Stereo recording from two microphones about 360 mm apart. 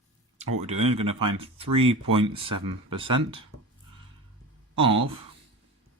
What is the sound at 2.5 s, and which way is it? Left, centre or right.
Speech, right.